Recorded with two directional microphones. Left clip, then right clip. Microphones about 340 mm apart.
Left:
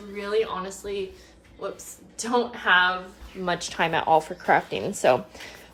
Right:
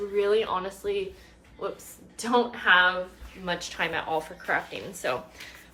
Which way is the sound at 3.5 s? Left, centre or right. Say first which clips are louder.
Left 4 dB; centre.